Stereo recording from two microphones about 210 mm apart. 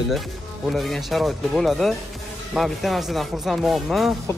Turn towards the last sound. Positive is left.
turn(degrees=0)  # may be behind; listen again after turning